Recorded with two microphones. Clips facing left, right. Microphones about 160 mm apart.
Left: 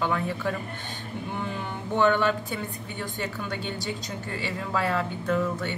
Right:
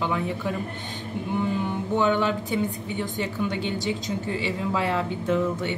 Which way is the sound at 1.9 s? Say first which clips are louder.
Left 1 dB; 15° right (ahead or behind).